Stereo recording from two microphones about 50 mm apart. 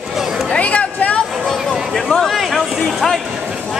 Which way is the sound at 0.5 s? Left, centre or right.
Left.